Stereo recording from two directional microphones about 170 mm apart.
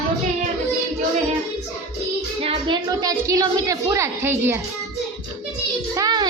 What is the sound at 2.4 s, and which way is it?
A woman's voice, 25° right (ahead or behind).